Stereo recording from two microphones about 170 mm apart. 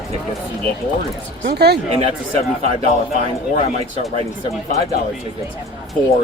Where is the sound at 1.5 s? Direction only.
70° right (ahead or behind).